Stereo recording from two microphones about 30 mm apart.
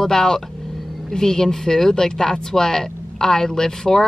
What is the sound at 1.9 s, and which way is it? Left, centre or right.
Speech, left.